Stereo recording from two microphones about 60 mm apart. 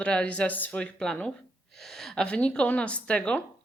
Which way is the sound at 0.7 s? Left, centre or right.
Centre.